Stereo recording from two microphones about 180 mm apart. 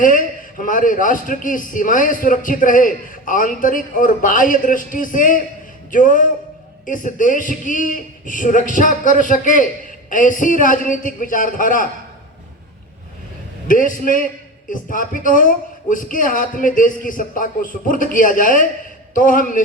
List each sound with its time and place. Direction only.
0.0 s a man's voice: 50° left (ahead or behind)
13.7 s a man's voice: 50° left (ahead or behind)